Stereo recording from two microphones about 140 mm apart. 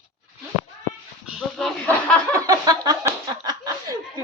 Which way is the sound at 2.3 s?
25° right (ahead or behind).